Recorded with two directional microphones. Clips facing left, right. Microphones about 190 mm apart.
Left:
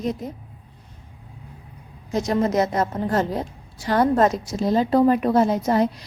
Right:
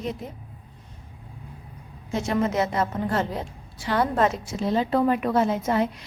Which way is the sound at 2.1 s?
40° left (ahead or behind).